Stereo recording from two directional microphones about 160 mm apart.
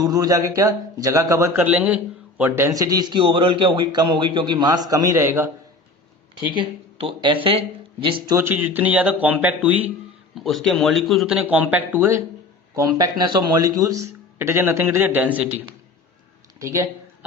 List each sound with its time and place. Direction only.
0.0 s a man's voice: 25° right (ahead or behind)
1.6 s a man's voice: 10° right (ahead or behind)
6.6 s a man's voice: 30° right (ahead or behind)
8.4 s speech: 10° right (ahead or behind)
10.3 s speech: centre (ahead or behind); by 12.2 s 15° right (ahead or behind)
13.0 s a man's voice: 25° right (ahead or behind)